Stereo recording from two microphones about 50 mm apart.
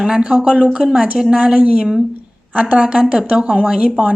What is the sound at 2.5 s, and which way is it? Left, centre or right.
A woman's voice, right.